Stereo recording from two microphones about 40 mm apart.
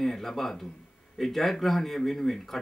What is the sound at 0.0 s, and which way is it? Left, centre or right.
Speech, centre.